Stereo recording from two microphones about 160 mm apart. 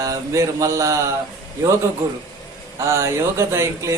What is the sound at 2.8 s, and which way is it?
Speech, 15° right (ahead or behind).